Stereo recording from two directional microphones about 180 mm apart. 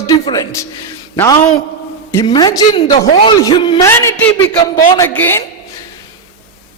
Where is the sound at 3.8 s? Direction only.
15° left (ahead or behind).